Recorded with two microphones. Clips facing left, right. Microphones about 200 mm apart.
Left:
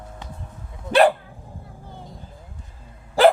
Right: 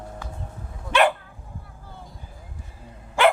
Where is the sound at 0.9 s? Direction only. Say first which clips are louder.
Left 4 dB; 35° left (ahead or behind).